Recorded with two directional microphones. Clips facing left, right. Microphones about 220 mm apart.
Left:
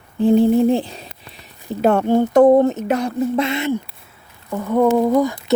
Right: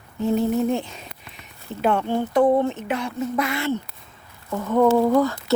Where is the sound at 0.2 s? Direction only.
30° left (ahead or behind).